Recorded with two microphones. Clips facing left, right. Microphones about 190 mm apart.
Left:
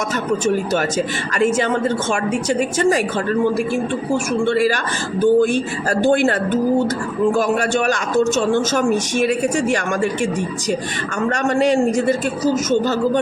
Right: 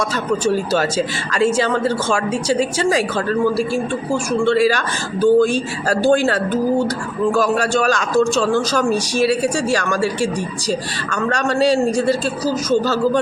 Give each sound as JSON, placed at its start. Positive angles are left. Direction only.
{"t": 0.4, "sound": "speech", "side_deg": 20}
{"t": 5.2, "sound": "speech", "side_deg": 20}
{"t": 7.3, "sound": "speech", "side_deg": 20}